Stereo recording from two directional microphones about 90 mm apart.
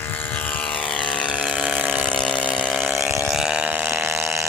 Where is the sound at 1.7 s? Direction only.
15° right (ahead or behind).